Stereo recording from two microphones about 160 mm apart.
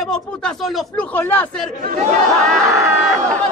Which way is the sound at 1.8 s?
60° right (ahead or behind).